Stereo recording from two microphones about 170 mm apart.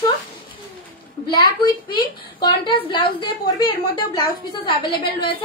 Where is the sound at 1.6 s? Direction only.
25° left (ahead or behind).